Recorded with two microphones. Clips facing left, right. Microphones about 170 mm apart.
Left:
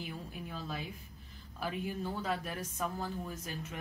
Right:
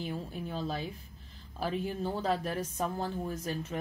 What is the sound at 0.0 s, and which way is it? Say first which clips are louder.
A woman's voice: right 6 dB; 30° right (ahead or behind).